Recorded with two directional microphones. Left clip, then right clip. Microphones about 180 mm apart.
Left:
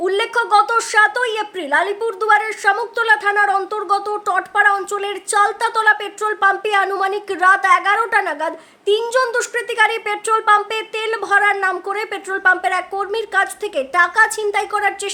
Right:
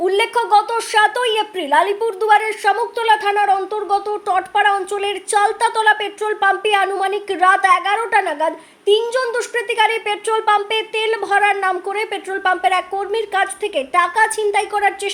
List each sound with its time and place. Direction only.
0.0 s a woman's voice: centre (ahead or behind)